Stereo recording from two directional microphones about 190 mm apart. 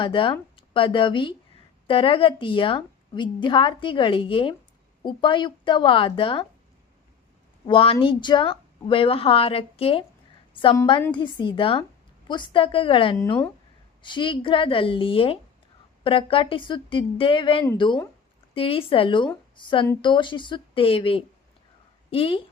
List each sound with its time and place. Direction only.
0.0 s a woman's voice: 25° left (ahead or behind)
7.7 s a woman's voice: 30° left (ahead or behind)